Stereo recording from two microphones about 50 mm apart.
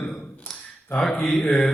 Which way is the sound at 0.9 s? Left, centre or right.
Centre.